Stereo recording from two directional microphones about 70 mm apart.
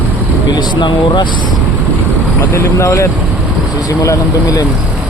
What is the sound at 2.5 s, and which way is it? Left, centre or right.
Speech, left.